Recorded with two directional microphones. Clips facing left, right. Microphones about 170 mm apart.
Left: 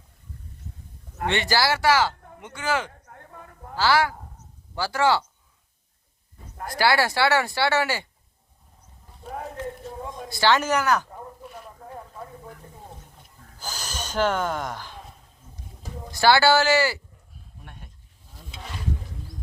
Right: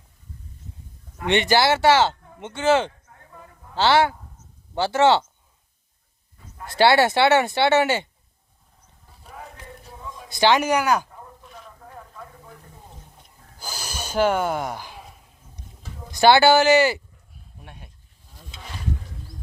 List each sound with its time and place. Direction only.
1.3 s speech: 20° right (ahead or behind)
3.1 s a sound: 55° left (ahead or behind)
3.8 s speech: 25° right (ahead or behind)
6.7 s speech: 25° right (ahead or behind)
9.2 s a sound: 45° left (ahead or behind)
10.2 s speech: 20° right (ahead or behind)
13.6 s snort: 10° right (ahead or behind)
16.1 s speech: 20° right (ahead or behind)
17.7 s goat: 10° right (ahead or behind)